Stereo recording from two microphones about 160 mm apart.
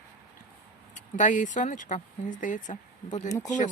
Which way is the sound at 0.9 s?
50° left (ahead or behind).